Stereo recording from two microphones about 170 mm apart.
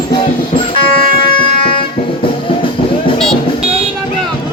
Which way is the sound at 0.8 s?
30° left (ahead or behind).